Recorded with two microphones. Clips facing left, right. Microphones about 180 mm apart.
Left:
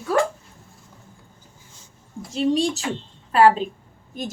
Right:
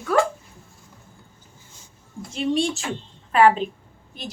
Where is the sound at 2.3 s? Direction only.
35° left (ahead or behind).